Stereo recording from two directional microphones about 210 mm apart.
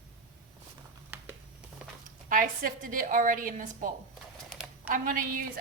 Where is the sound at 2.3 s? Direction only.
40° right (ahead or behind).